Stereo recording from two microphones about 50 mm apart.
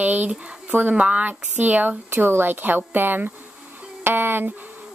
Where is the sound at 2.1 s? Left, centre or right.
Right.